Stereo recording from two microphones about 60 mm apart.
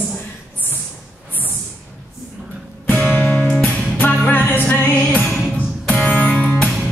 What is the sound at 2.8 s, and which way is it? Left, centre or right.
Music, left.